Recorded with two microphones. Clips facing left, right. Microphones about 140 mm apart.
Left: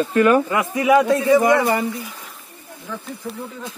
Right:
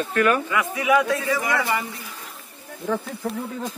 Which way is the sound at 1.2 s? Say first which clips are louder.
Left 9 dB; 25° left (ahead or behind).